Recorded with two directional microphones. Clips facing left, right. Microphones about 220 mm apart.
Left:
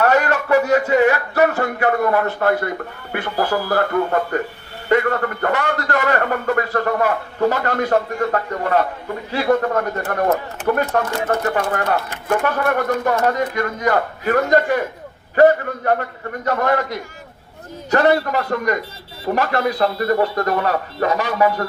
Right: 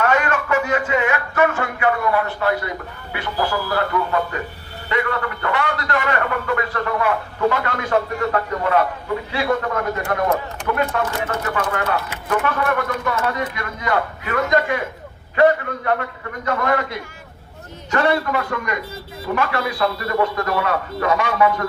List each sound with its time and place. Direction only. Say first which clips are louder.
0.0 s a man's voice: left 3 dB; 40° left (ahead or behind)